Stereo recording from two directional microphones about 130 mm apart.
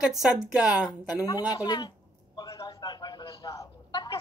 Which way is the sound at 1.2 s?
30° left (ahead or behind).